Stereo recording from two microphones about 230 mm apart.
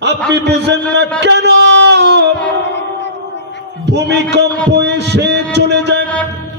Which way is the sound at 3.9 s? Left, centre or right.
Right.